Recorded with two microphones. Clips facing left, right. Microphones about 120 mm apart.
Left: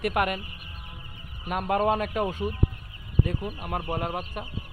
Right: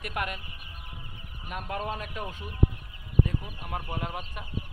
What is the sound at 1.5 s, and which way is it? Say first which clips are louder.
Speech: left 10 dB; 70° left (ahead or behind).